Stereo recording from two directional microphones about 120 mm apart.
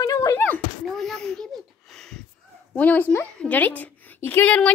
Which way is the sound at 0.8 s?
5° left (ahead or behind).